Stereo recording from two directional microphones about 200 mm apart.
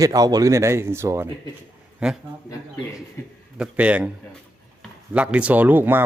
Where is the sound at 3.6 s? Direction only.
5° right (ahead or behind).